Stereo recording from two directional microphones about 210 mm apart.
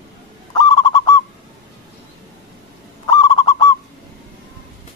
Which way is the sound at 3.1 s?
20° left (ahead or behind).